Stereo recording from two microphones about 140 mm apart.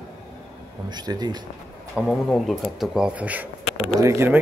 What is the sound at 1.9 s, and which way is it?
Speech, centre (ahead or behind).